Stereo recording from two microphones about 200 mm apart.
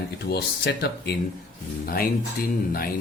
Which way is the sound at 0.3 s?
50° left (ahead or behind).